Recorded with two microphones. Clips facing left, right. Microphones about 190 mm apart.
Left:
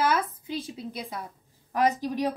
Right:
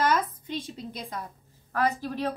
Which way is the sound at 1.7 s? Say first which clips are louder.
Left 3 dB; 15° left (ahead or behind).